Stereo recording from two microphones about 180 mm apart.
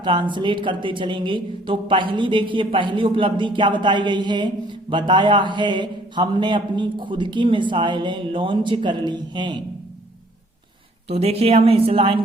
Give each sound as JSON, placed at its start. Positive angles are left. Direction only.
{"t": 0.0, "sound": "speech", "side_deg": -25}
{"t": 11.1, "sound": "speech", "side_deg": -35}